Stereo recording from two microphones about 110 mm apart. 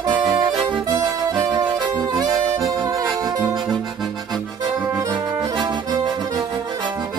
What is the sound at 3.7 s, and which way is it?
Accordion, 5° left (ahead or behind).